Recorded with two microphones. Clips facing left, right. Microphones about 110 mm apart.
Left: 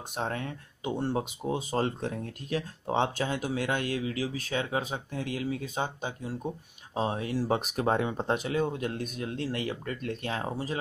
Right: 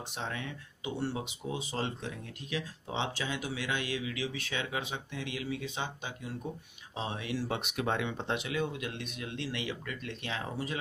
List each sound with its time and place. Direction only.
0.1 s speech: 45° left (ahead or behind)